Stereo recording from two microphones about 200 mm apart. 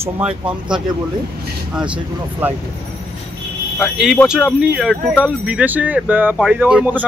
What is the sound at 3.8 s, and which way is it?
Speech, centre (ahead or behind).